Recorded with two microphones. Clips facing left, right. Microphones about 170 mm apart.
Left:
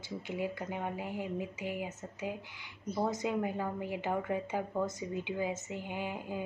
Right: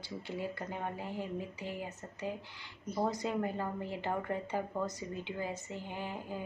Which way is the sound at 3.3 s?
10° left (ahead or behind).